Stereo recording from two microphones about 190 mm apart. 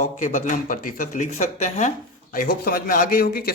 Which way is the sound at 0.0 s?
40° left (ahead or behind).